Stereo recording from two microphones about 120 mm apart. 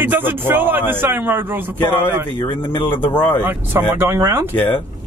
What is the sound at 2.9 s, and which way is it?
Speech, 15° left (ahead or behind).